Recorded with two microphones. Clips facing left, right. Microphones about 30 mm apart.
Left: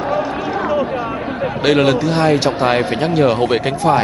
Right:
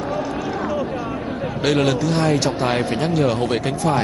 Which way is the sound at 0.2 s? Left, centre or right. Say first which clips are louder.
Left 4 dB; left.